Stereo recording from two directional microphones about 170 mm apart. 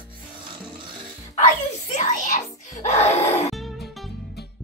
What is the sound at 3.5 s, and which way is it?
Music, centre (ahead or behind).